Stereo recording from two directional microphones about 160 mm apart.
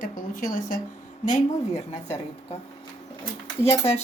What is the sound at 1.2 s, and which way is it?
Speech, 45° left (ahead or behind).